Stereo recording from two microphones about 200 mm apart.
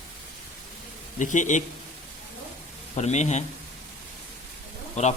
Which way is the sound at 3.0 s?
35° left (ahead or behind).